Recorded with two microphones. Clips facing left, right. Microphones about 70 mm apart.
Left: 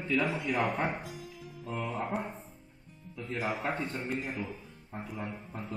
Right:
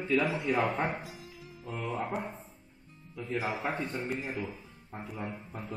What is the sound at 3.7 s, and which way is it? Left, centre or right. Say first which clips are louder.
Speech: even; centre.